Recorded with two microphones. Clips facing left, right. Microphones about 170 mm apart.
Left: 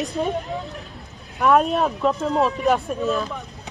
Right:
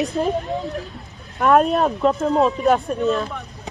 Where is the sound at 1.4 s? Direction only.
Centre (ahead or behind).